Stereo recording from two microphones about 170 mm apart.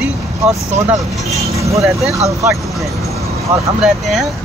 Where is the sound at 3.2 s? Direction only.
20° right (ahead or behind).